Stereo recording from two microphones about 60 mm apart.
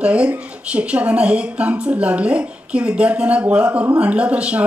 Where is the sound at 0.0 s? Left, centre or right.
Centre.